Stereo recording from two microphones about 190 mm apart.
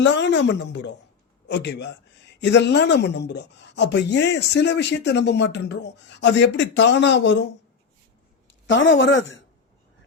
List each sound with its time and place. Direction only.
0.0 s speech: 70° left (ahead or behind)
8.7 s speech: 70° left (ahead or behind)